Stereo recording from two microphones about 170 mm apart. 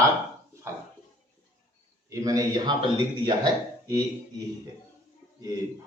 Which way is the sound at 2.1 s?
20° right (ahead or behind).